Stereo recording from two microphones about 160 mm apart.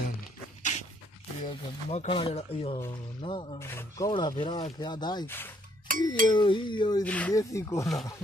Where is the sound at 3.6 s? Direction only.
15° left (ahead or behind).